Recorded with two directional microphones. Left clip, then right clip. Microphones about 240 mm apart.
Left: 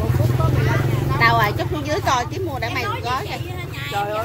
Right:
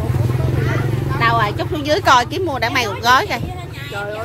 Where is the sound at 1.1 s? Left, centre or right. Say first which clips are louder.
Even; centre; by 3.4 s right.